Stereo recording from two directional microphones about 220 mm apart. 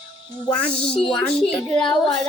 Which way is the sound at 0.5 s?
5° left (ahead or behind).